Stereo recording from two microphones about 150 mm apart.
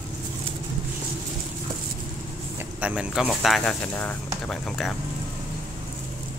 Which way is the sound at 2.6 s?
10° right (ahead or behind).